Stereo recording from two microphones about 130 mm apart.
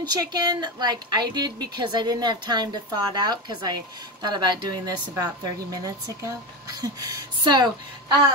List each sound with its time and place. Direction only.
0.0 s speech: 35° right (ahead or behind)